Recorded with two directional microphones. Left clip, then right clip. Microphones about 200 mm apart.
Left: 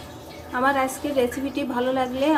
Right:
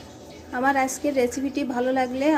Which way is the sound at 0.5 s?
20° right (ahead or behind).